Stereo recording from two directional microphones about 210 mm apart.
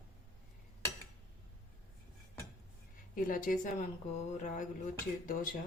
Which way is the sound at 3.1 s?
40° left (ahead or behind).